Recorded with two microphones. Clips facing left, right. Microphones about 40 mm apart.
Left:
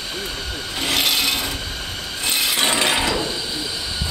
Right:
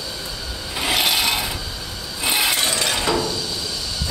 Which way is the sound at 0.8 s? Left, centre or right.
Centre.